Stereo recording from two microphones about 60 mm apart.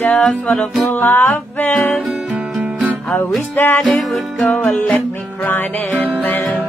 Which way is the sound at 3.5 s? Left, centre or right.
Left.